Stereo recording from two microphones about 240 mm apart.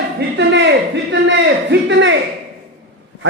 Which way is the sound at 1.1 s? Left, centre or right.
Right.